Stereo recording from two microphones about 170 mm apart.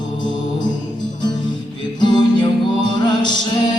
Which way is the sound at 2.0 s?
25° left (ahead or behind).